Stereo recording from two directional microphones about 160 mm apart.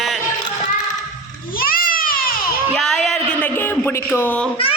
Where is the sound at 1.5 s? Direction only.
65° left (ahead or behind).